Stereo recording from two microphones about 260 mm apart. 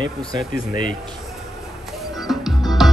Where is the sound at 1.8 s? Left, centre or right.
Centre.